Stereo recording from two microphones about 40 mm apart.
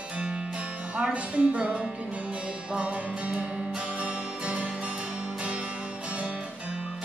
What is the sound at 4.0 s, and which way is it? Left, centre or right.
Music, right.